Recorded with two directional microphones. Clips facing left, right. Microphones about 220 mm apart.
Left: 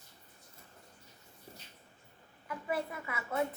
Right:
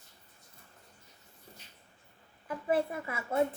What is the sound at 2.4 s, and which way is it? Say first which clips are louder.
Speech: right 6 dB; 30° right (ahead or behind).